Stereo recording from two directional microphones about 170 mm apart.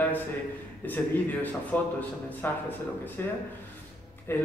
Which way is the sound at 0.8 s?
10° left (ahead or behind).